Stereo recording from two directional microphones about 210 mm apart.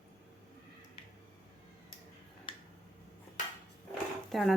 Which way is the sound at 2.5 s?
25° left (ahead or behind).